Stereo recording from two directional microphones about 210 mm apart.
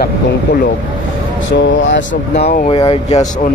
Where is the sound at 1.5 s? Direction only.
60° left (ahead or behind).